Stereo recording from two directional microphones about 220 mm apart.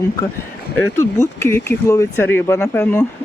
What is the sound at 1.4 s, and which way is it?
Speech, 10° left (ahead or behind).